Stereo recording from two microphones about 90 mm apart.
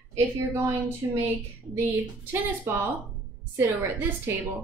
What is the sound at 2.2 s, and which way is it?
A woman's voice, 25° right (ahead or behind).